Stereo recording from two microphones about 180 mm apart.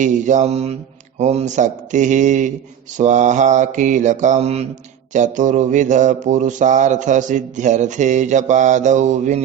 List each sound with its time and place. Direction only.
0.0 s mantra: 45° right (ahead or behind)